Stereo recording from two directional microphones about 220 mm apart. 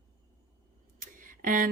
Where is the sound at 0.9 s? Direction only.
35° right (ahead or behind).